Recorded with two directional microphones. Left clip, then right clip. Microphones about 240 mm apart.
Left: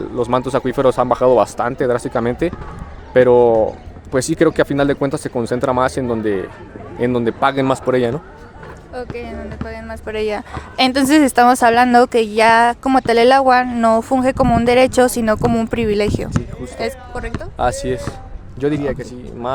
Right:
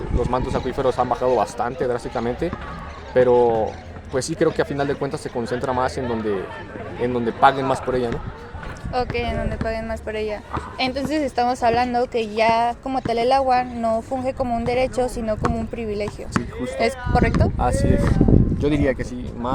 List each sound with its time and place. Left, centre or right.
0.2 s a woman's voice: left
8.9 s speech: right
10.1 s a woman's voice: left
17.1 s speech: right
17.6 s a woman's voice: left
18.8 s speech: centre